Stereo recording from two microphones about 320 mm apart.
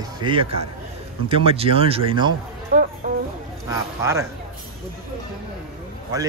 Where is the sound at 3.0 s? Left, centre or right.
Right.